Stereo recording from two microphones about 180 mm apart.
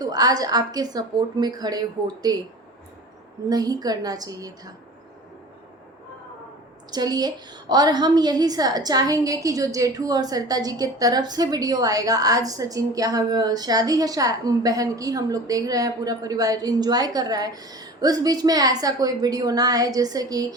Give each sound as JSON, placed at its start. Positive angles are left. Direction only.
{"t": 0.0, "sound": "a woman's voice", "side_deg": -20}
{"t": 3.5, "sound": "a woman's voice", "side_deg": -20}
{"t": 6.9, "sound": "a woman's voice", "side_deg": -20}